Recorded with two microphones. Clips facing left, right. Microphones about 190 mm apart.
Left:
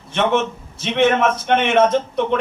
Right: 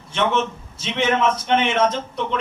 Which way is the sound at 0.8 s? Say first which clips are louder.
Left 4 dB; 55° left (ahead or behind).